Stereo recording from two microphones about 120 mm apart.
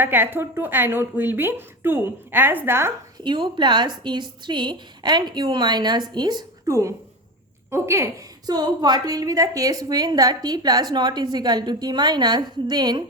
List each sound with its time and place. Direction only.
0.0 s a woman's voice: 15° right (ahead or behind)
3.2 s a woman's voice: 40° right (ahead or behind); by 8.1 s 20° right (ahead or behind)
8.4 s a woman's voice: 35° right (ahead or behind)